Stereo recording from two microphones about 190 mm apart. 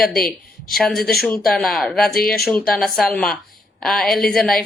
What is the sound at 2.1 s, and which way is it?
Speech, 50° left (ahead or behind).